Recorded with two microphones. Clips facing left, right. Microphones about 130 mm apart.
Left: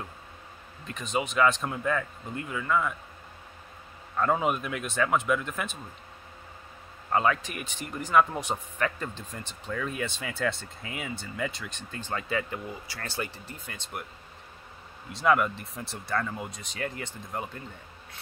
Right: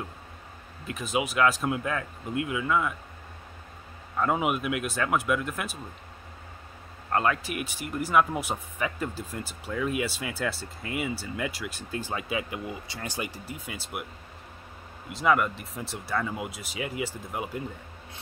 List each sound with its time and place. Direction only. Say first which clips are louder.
0.8 s speech: right 2 dB; 5° right (ahead or behind)
4.2 s speech: even; 5° right (ahead or behind)
7.1 s speech: even; centre (ahead or behind)
15.1 s speech: even; centre (ahead or behind)